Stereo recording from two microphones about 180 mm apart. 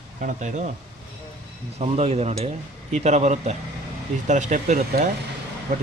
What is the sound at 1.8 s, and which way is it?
Speech, 35° right (ahead or behind).